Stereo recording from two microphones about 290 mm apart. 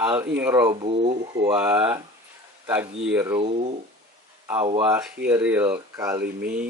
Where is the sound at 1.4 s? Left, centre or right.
Centre.